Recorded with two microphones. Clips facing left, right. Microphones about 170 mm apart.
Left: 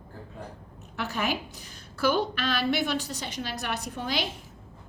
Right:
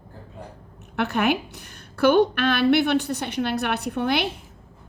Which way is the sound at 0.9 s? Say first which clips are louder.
Right 8 dB; 65° right (ahead or behind).